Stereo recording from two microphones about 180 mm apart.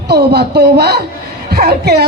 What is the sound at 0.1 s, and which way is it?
A woman's voice, 65° right (ahead or behind).